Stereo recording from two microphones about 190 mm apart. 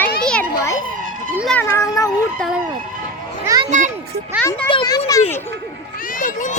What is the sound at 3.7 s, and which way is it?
Speech, 40° right (ahead or behind).